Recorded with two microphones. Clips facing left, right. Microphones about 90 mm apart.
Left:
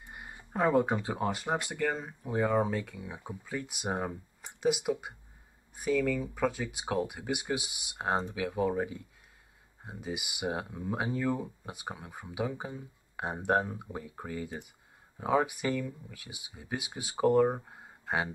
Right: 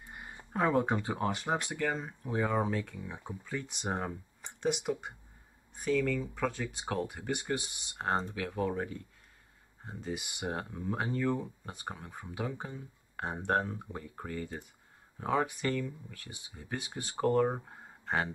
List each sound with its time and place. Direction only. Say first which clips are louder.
0.1 s speech: even; 5° left (ahead or behind)